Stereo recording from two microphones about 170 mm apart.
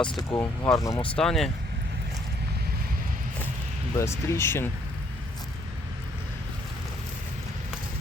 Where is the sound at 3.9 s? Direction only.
15° left (ahead or behind).